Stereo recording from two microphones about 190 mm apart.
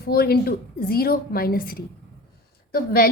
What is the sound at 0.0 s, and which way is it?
A woman's voice, 55° left (ahead or behind).